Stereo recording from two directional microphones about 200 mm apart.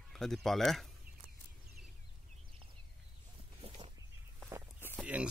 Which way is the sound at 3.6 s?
30° right (ahead or behind).